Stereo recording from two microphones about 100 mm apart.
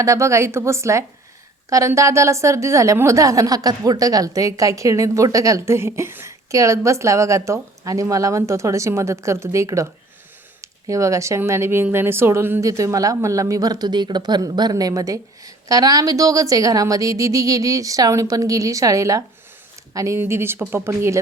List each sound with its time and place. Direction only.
0.0 s speech: 30° right (ahead or behind)